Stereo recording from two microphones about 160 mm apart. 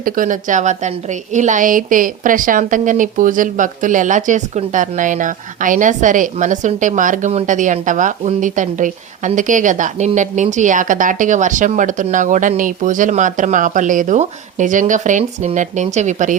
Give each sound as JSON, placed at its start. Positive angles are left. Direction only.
{"t": 0.0, "sound": "a woman's voice", "side_deg": -55}